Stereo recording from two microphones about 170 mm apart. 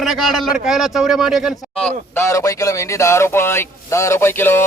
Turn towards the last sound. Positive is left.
turn(degrees=15)  # may be behind; listen again after turning